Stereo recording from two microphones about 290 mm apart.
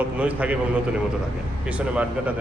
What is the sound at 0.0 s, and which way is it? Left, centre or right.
A man's voice, centre.